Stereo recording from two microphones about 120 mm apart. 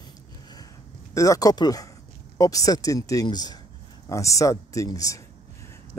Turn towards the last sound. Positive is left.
turn(degrees=30)  # may be behind; listen again after turning